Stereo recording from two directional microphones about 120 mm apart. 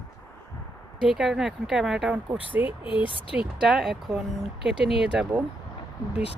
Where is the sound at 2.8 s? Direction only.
45° left (ahead or behind).